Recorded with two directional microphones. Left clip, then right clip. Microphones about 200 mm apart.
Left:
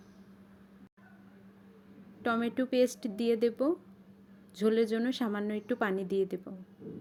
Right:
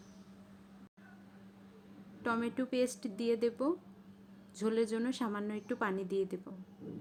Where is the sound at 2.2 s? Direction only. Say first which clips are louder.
Left 4 dB; 15° left (ahead or behind).